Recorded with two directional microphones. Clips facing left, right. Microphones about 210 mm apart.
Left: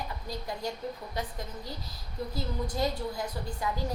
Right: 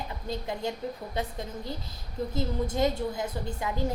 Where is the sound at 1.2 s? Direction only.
25° right (ahead or behind).